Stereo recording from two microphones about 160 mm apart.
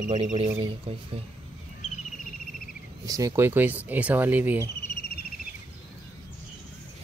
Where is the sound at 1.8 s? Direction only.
50° left (ahead or behind).